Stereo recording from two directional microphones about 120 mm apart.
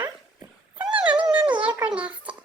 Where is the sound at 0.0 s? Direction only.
15° right (ahead or behind).